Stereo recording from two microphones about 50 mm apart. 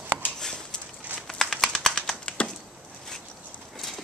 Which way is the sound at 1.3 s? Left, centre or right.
Centre.